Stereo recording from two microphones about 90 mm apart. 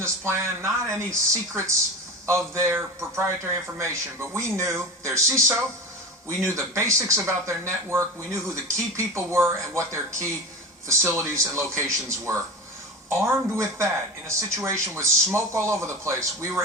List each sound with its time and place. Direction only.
0.0 s speech: 30° right (ahead or behind)